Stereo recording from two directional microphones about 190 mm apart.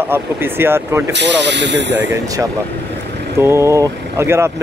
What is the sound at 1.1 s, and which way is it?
Speech, 65° right (ahead or behind).